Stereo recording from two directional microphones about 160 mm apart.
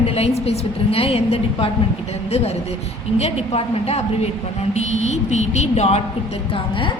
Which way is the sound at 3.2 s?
40° left (ahead or behind).